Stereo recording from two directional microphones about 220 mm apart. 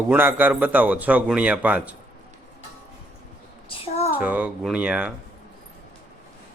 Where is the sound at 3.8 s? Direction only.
30° left (ahead or behind).